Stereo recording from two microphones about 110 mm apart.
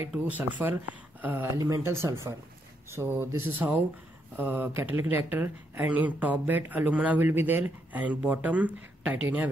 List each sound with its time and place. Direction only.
0.2 s speech: 15° right (ahead or behind)